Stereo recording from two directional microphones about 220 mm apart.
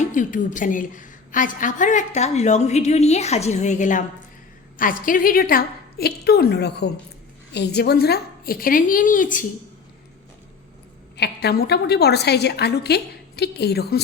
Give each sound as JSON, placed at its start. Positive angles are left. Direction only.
{"t": 0.0, "sound": "a woman's voice", "side_deg": 35}
{"t": 11.2, "sound": "a woman's voice", "side_deg": 45}